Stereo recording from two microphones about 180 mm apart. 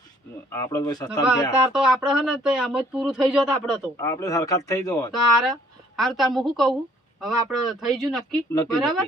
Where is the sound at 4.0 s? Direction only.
15° left (ahead or behind).